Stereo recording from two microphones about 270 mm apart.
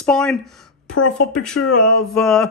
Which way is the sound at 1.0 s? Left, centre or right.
Left.